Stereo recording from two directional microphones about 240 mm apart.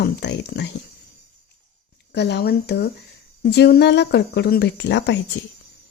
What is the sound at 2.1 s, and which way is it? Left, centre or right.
A woman's voice, left.